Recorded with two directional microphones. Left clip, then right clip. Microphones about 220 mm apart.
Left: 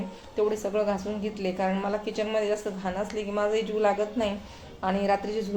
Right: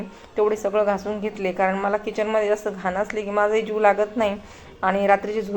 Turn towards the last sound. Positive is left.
turn(degrees=-15)  # may be behind; listen again after turning